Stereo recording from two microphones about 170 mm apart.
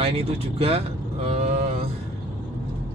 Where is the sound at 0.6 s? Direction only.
35° right (ahead or behind).